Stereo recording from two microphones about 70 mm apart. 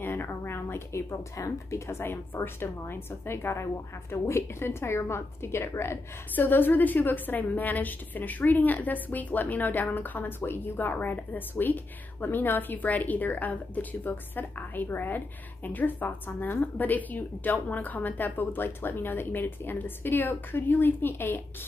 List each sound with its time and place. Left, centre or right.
0.0 s a woman's voice: left
6.3 s a woman's voice: left